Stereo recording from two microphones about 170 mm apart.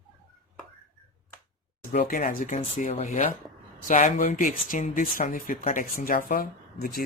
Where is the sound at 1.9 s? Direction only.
55° left (ahead or behind).